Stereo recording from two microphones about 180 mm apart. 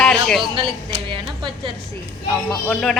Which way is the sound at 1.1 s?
25° right (ahead or behind).